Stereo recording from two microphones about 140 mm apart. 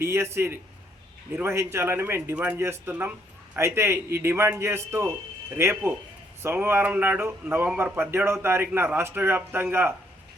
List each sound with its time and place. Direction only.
0.0 s a man's voice: 20° right (ahead or behind)